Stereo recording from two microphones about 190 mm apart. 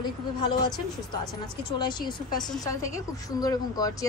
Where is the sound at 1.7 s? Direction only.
25° left (ahead or behind).